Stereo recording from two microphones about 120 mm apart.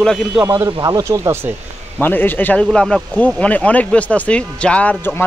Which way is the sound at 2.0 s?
15° left (ahead or behind).